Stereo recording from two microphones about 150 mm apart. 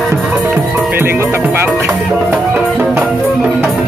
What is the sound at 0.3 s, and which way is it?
Music, 5° right (ahead or behind).